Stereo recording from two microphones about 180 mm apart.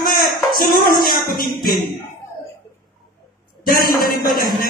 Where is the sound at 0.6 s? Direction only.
55° left (ahead or behind).